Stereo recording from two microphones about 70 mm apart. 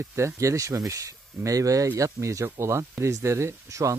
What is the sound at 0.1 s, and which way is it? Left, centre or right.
Speech, right.